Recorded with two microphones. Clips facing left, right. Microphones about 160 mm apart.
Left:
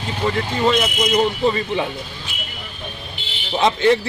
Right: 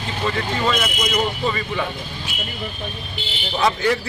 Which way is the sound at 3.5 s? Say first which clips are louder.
Left 4 dB; 25° left (ahead or behind).